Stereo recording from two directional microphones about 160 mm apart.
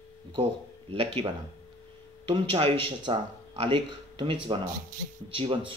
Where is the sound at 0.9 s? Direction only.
40° right (ahead or behind).